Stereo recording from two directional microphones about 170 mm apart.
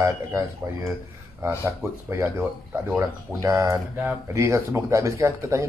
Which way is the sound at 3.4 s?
20° right (ahead or behind).